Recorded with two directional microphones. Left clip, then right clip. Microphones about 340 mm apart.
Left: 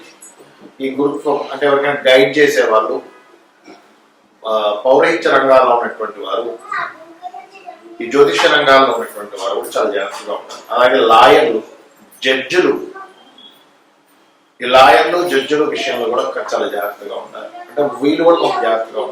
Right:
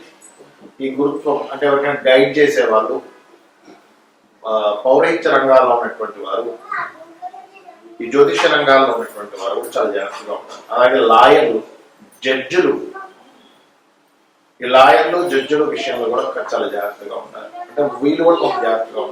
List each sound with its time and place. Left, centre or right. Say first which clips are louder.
1.3 s speech: left 2 dB; centre
4.7 s speech: left 2 dB; right
4.9 s speech: left 2 dB; centre
7.9 s speech: left 1 dB; centre
14.6 s a man's voice: left 2 dB; centre